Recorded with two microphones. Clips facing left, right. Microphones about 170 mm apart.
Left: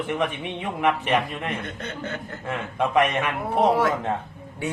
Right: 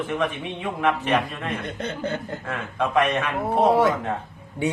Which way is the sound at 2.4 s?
15° left (ahead or behind).